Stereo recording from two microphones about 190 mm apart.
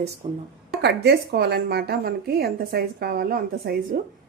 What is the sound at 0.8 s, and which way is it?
A woman's voice, 60° right (ahead or behind).